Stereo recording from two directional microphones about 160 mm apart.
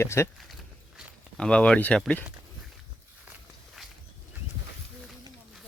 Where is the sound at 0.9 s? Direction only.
5° left (ahead or behind).